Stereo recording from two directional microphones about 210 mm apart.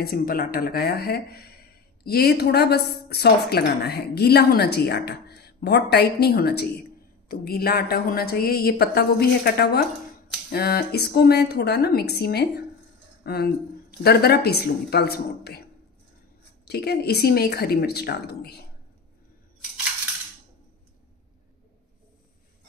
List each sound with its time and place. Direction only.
0.0 s a woman's voice: 45° left (ahead or behind)
16.6 s a woman's voice: 50° left (ahead or behind)